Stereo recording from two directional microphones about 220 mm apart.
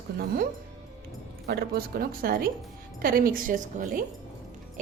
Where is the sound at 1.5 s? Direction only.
45° right (ahead or behind).